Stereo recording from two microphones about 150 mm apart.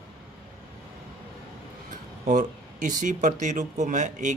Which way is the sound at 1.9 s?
55° right (ahead or behind).